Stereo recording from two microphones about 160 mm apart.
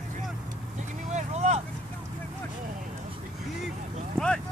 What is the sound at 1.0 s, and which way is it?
Speech, 45° right (ahead or behind).